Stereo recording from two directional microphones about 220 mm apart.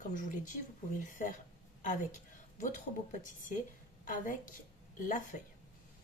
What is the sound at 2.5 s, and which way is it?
A woman's voice, 35° left (ahead or behind).